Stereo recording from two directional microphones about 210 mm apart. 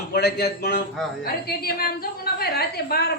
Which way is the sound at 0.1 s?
50° left (ahead or behind).